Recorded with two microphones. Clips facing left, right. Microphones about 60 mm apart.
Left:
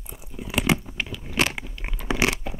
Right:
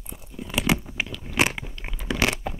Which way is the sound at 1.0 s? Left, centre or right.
Centre.